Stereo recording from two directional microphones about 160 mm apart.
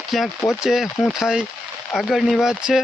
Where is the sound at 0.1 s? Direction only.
Centre (ahead or behind).